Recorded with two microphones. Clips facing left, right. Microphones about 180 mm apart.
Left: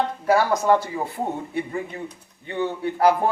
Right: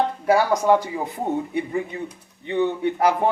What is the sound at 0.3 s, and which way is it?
Speech, 10° right (ahead or behind).